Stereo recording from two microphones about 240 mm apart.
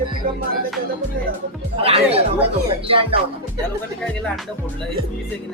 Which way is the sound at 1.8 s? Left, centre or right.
Right.